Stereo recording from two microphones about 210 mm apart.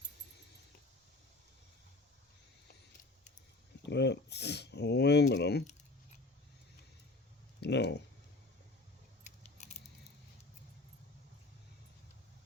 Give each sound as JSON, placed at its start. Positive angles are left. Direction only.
{"t": 3.8, "sound": "speech", "side_deg": 55}
{"t": 7.6, "sound": "speech", "side_deg": 55}
{"t": 9.2, "sound": "keys jangling", "side_deg": 35}